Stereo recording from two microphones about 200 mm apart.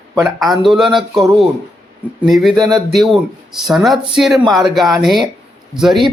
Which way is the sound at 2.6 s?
20° right (ahead or behind).